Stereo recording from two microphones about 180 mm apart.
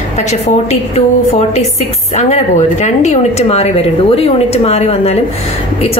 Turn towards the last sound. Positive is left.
turn(degrees=35)  # may be behind; listen again after turning